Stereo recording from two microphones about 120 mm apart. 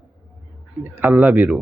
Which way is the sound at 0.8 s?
15° right (ahead or behind).